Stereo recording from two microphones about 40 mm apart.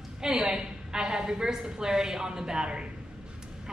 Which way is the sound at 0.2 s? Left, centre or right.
Centre.